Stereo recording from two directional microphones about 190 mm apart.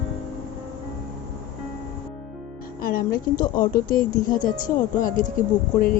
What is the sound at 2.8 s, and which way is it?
A woman's voice, 50° left (ahead or behind).